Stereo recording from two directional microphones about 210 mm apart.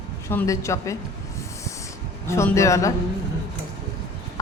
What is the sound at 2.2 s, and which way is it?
Speech, 15° left (ahead or behind).